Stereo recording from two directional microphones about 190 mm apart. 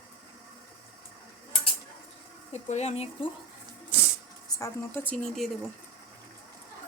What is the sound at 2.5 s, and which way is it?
Speech, 35° left (ahead or behind).